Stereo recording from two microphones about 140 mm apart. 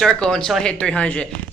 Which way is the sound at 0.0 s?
5° left (ahead or behind).